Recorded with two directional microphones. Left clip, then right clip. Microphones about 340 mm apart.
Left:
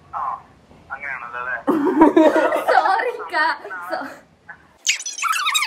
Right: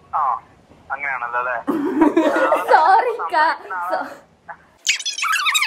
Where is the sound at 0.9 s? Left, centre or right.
Centre.